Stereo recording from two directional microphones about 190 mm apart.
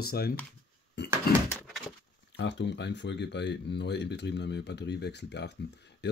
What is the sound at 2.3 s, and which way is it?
Speech, 70° left (ahead or behind).